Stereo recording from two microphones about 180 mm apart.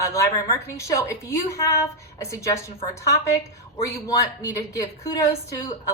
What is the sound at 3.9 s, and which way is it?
A woman's voice, 20° left (ahead or behind).